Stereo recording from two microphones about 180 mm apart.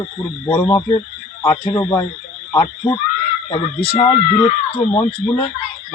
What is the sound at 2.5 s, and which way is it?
Speech, 20° left (ahead or behind).